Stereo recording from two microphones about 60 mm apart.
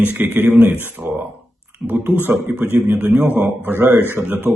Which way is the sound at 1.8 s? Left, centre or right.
Right.